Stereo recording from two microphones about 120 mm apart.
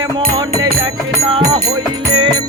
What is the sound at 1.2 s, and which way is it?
Music, 55° right (ahead or behind).